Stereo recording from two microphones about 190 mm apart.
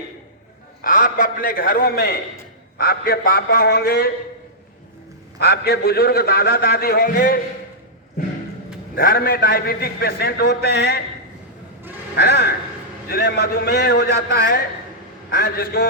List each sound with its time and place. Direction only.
0.8 s a man's voice: 50° left (ahead or behind)
5.4 s a man's voice: 55° left (ahead or behind)
9.0 s a man's voice: 50° left (ahead or behind)
12.1 s a man's voice: 60° left (ahead or behind)